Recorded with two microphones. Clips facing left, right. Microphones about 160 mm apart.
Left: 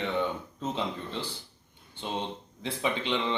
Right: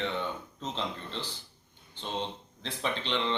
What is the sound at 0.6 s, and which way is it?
Speech, 10° left (ahead or behind).